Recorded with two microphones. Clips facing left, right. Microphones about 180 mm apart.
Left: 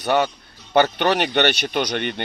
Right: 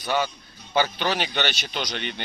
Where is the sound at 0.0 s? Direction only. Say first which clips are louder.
Left 6 dB; 65° left (ahead or behind).